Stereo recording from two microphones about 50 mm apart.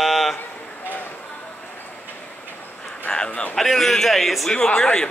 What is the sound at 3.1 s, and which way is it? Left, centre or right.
Speech, centre.